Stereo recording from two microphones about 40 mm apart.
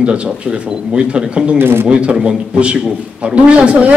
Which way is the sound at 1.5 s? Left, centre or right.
Right.